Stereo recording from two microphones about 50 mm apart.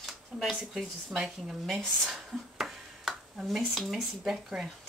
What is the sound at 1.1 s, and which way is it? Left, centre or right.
Speech, centre.